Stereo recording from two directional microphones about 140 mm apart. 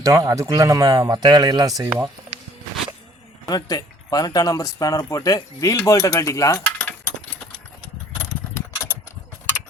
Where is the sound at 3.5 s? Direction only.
30° left (ahead or behind).